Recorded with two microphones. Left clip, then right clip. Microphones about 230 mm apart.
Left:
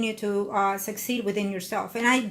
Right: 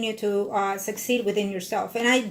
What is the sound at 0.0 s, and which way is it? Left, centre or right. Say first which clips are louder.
Speech: right 2 dB; left.